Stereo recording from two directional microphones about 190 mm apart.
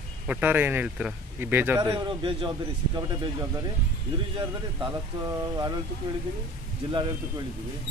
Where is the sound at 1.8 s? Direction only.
25° right (ahead or behind).